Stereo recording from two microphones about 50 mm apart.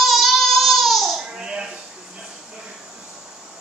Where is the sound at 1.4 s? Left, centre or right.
Centre.